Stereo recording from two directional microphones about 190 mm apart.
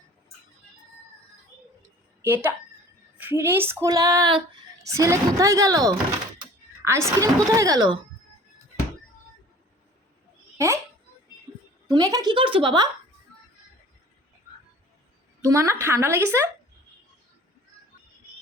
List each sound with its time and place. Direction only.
2.2 s speech: 10° right (ahead or behind)
10.6 s a child's voice: 15° right (ahead or behind)
11.9 s a woman's voice: 20° right (ahead or behind)
15.4 s speech: 15° right (ahead or behind)